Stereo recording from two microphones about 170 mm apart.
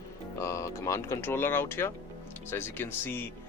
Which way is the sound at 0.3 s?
15° left (ahead or behind).